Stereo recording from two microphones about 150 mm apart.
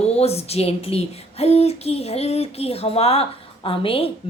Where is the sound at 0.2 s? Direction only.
45° left (ahead or behind).